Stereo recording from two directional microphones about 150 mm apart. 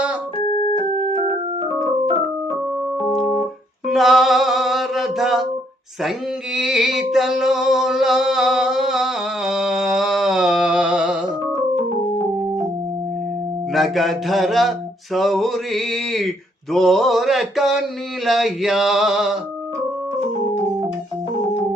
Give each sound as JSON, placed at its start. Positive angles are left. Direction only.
{"t": 0.4, "sound": "organ", "side_deg": 35}
{"t": 1.1, "sound": "organ", "side_deg": -40}
{"t": 3.1, "sound": "organ", "side_deg": 0}
{"t": 3.8, "sound": "a sound", "side_deg": 0}
{"t": 6.6, "sound": "a sound", "side_deg": -5}
{"t": 13.7, "sound": "mantra", "side_deg": 0}